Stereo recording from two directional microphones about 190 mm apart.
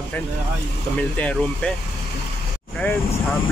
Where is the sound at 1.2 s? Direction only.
5° left (ahead or behind).